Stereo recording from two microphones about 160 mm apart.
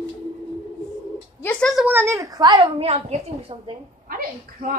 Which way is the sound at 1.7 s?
10° right (ahead or behind).